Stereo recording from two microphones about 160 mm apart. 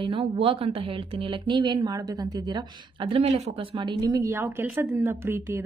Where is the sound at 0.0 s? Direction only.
35° right (ahead or behind).